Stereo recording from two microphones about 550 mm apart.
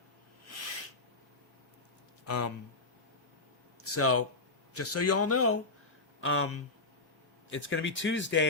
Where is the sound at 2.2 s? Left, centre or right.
Left.